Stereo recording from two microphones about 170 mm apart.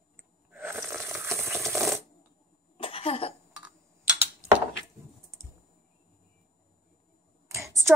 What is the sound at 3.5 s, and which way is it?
Tick-tock, 5° right (ahead or behind).